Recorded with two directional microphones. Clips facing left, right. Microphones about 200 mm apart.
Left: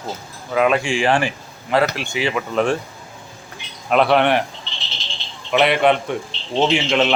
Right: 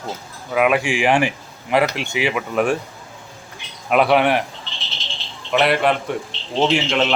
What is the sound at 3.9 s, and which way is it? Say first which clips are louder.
Speech: even; 5° right (ahead or behind).